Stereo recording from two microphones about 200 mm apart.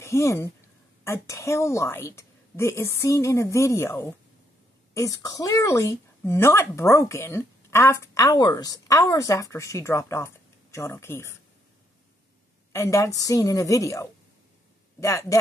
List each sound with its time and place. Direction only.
0.0 s speech: 15° left (ahead or behind)
12.7 s speech: 15° left (ahead or behind)